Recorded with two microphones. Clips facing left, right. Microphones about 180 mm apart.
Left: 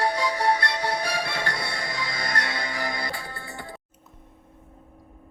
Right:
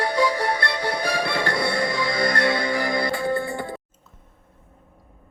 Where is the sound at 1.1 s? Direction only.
60° right (ahead or behind).